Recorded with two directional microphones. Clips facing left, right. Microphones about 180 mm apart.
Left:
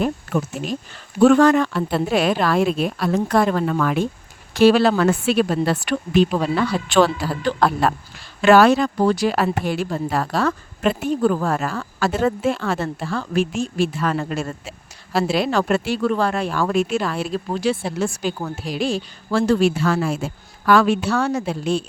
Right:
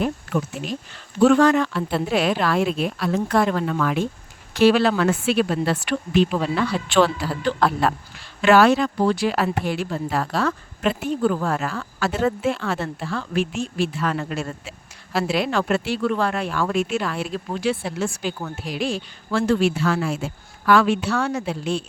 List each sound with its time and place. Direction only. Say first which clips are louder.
0.0 s speech: left 2 dB; 45° left (ahead or behind)